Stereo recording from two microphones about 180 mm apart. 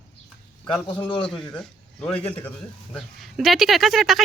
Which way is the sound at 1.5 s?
5° left (ahead or behind).